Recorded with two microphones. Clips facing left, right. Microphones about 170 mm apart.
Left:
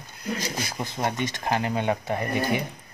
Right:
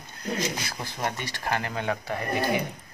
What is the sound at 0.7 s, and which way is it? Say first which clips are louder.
Speech: left 3 dB; 20° left (ahead or behind).